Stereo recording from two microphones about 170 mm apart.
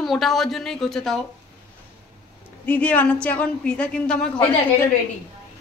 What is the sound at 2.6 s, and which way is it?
A woman's voice, 10° left (ahead or behind).